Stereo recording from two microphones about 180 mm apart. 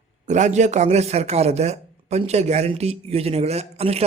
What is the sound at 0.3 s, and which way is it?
A man's voice, 40° right (ahead or behind).